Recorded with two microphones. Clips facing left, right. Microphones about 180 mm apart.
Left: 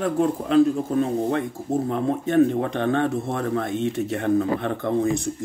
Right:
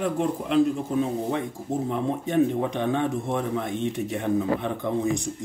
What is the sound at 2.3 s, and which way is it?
Speech, 15° right (ahead or behind).